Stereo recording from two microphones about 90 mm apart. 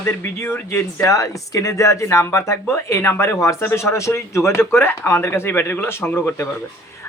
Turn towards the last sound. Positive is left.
turn(degrees=25)  # may be behind; listen again after turning